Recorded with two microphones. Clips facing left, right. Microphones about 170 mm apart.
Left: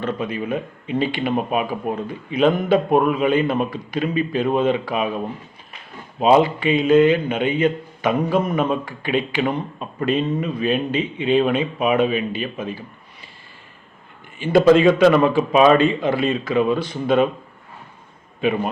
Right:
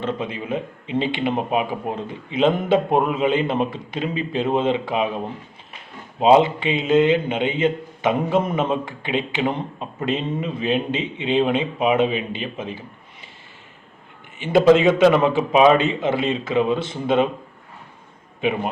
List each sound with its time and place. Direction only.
0.0 s a man's voice: 25° right (ahead or behind)
6.1 s a man's voice: 20° right (ahead or behind)
14.3 s a man's voice: 20° right (ahead or behind)
18.3 s a man's voice: 20° right (ahead or behind)